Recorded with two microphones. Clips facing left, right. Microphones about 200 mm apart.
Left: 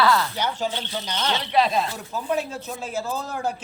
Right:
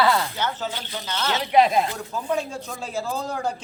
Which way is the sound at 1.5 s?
15° right (ahead or behind).